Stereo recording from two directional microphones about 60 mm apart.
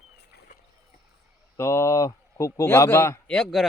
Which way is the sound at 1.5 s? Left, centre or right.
Left.